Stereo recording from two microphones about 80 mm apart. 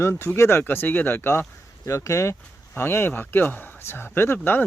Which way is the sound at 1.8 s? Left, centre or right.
Left.